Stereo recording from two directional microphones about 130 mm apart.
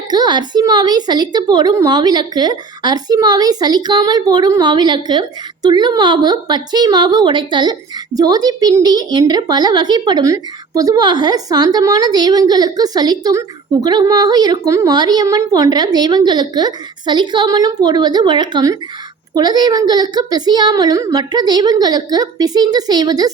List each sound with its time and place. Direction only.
0.1 s a woman's voice: 35° right (ahead or behind)